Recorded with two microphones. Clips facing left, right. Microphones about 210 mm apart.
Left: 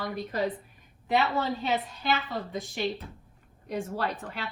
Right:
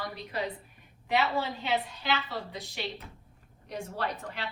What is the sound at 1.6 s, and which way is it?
A woman's voice, 45° left (ahead or behind).